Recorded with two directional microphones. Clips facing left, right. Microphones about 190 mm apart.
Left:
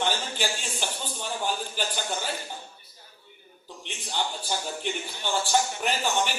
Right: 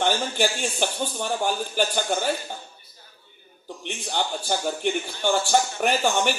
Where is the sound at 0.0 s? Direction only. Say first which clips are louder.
Right 6 dB; 55° right (ahead or behind).